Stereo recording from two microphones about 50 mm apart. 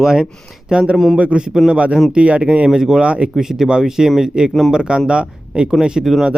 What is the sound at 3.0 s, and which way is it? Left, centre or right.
Speech, right.